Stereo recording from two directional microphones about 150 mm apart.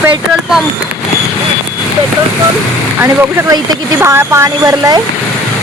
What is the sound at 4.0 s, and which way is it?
Speech, 15° right (ahead or behind).